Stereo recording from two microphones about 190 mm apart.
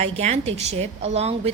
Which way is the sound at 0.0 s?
35° right (ahead or behind).